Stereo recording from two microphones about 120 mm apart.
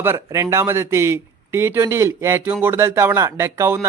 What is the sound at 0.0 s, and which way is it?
A man's voice, 20° right (ahead or behind).